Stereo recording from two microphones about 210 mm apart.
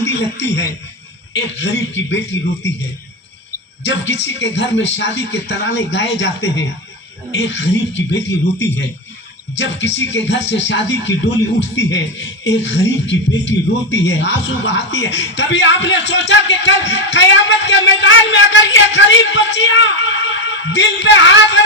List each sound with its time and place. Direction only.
0.1 s speech: 55° left (ahead or behind)
3.8 s speech: 55° left (ahead or behind)